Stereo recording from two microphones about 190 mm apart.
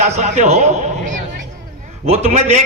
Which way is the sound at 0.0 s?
35° right (ahead or behind).